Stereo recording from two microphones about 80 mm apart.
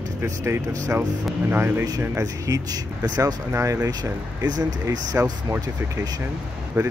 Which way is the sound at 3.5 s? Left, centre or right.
Right.